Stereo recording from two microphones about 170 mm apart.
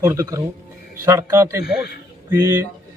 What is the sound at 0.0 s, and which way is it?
A man's voice, 15° right (ahead or behind).